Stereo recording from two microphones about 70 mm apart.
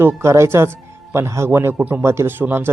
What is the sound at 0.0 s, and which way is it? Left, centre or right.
Speech, right.